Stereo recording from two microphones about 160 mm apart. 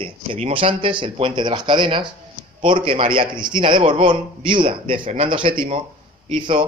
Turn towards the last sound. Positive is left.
turn(degrees=-30)  # may be behind; listen again after turning